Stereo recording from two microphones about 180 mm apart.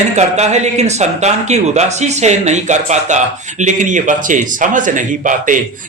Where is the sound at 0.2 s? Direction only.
40° right (ahead or behind).